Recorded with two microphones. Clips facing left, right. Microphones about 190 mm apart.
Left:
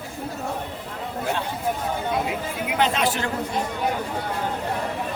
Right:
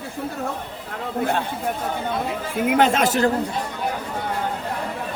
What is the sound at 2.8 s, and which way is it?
Speech, 45° right (ahead or behind).